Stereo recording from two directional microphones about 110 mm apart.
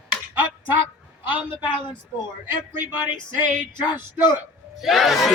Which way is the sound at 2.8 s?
15° right (ahead or behind).